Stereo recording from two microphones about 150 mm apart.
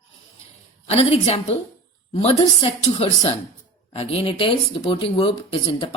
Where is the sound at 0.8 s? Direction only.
45° left (ahead or behind).